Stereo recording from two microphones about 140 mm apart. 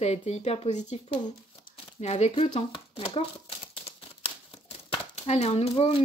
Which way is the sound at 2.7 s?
40° left (ahead or behind).